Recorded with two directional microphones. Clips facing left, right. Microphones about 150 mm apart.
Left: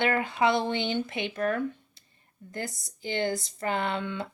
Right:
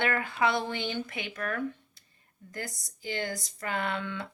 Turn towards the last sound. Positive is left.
turn(degrees=20)  # may be behind; listen again after turning